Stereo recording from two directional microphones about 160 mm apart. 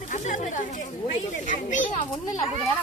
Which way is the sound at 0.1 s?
50° left (ahead or behind).